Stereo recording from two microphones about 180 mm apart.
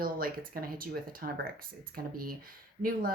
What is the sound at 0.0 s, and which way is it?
Speech, 55° right (ahead or behind).